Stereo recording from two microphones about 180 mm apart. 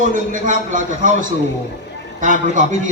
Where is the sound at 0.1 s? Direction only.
45° right (ahead or behind).